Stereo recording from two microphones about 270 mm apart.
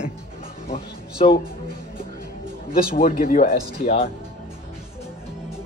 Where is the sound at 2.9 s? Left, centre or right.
Left.